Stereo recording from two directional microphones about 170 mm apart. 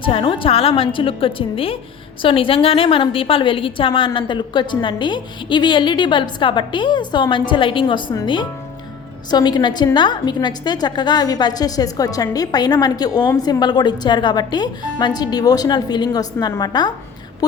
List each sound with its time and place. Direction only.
0.0 s a woman's voice: 30° left (ahead or behind)